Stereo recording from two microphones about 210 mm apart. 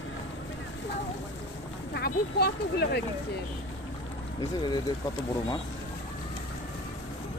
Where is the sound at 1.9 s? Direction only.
50° left (ahead or behind).